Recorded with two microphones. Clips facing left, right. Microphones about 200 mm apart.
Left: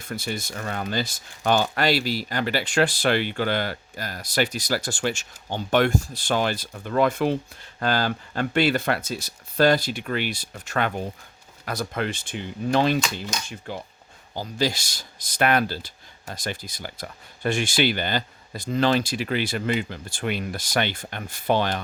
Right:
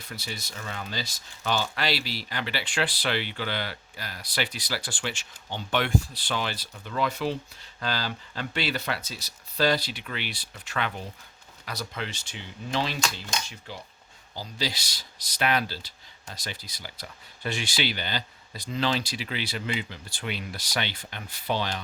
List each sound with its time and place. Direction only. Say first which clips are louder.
0.0 s speech: left 8 dB; 50° left (ahead or behind)